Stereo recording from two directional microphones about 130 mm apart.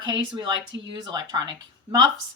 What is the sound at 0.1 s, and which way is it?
A woman's voice, 35° right (ahead or behind).